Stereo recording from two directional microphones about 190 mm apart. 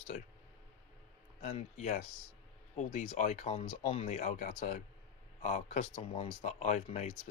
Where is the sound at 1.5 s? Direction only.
35° left (ahead or behind).